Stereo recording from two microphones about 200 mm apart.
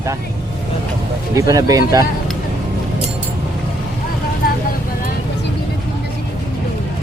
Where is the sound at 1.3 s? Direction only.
15° right (ahead or behind).